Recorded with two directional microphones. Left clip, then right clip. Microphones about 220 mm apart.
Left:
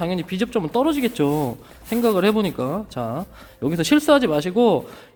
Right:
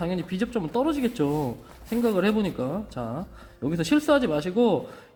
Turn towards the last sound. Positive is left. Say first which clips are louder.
# left 5 dB
turn(degrees=40)  # may be behind; listen again after turning